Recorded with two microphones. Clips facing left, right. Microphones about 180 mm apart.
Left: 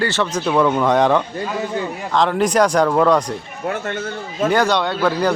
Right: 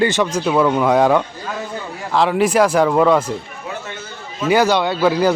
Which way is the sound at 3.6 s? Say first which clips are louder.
Left 10 dB; 55° left (ahead or behind).